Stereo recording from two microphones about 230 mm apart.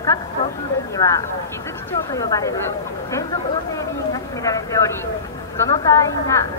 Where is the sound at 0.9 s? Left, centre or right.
Centre.